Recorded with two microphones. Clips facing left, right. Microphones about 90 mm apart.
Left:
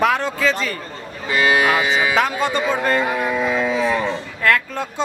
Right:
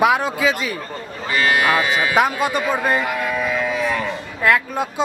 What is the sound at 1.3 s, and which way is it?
Speech, 10° left (ahead or behind).